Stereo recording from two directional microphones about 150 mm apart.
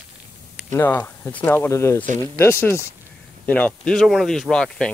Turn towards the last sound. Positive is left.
turn(degrees=5)  # may be behind; listen again after turning